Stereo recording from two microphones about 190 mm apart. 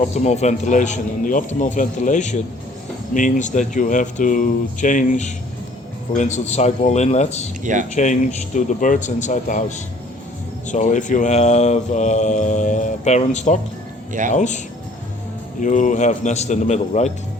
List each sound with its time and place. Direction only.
0.1 s speech: 35° left (ahead or behind)
7.6 s speech: 40° right (ahead or behind)
7.9 s speech: 40° left (ahead or behind)
14.1 s speech: 45° right (ahead or behind)
14.3 s speech: 40° left (ahead or behind)
15.6 s speech: 40° left (ahead or behind)